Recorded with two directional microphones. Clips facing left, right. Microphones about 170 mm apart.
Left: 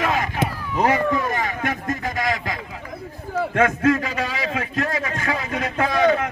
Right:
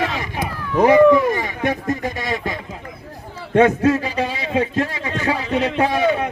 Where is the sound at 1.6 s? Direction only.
20° right (ahead or behind).